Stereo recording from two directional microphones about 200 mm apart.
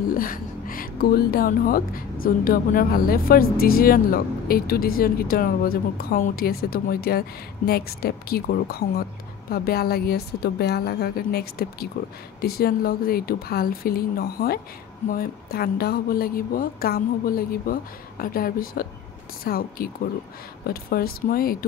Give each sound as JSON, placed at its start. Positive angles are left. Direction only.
{"t": 0.1, "sound": "a woman's voice", "side_deg": 45}